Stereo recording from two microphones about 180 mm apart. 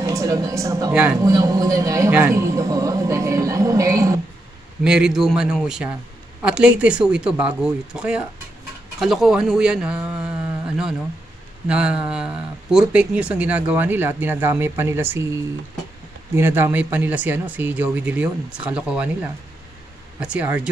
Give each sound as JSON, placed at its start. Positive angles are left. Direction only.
{"t": 0.0, "sound": "a man's voice", "side_deg": -20}
{"t": 4.8, "sound": "speech", "side_deg": -5}
{"t": 11.6, "sound": "a man's voice", "side_deg": -5}
{"t": 16.3, "sound": "a man's voice", "side_deg": -15}